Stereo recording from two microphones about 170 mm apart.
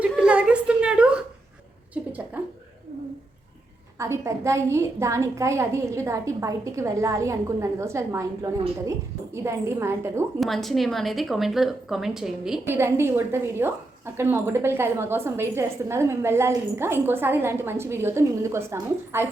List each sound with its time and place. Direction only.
0.0 s a sound: 5° right (ahead or behind)
3.9 s a woman's voice: 15° right (ahead or behind)
10.4 s a woman's voice: centre (ahead or behind)
12.6 s a woman's voice: 15° right (ahead or behind)